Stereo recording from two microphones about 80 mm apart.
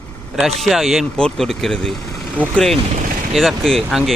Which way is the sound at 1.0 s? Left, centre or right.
Centre.